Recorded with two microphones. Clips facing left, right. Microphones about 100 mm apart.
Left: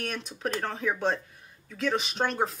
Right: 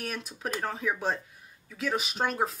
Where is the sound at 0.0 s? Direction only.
5° right (ahead or behind).